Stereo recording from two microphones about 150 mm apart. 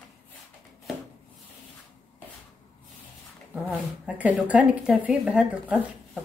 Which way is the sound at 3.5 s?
10° right (ahead or behind).